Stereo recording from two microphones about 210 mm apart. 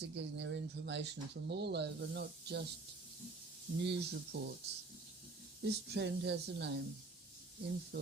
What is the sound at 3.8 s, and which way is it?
Speech, 55° right (ahead or behind).